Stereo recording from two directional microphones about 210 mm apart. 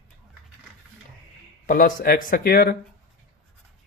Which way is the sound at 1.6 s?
40° left (ahead or behind).